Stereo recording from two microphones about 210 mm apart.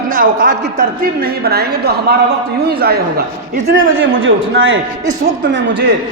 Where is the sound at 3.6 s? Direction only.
65° right (ahead or behind).